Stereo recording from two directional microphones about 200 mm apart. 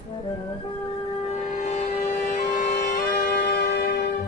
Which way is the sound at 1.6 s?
35° left (ahead or behind).